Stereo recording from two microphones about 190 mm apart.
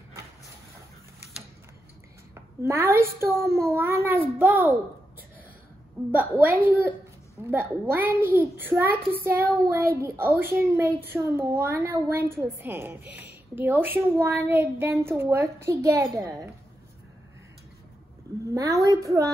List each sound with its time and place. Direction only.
2.3 s a child's voice: 15° right (ahead or behind)
6.1 s a woman's voice: 10° right (ahead or behind)
7.8 s a woman's voice: 10° right (ahead or behind)
18.4 s a woman's voice: 15° right (ahead or behind)